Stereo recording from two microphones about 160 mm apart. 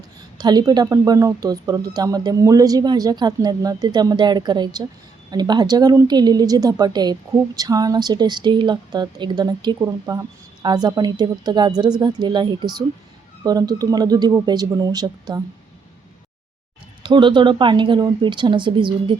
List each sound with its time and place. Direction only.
0.3 s a woman's voice: 25° right (ahead or behind)
17.0 s speech: 30° right (ahead or behind)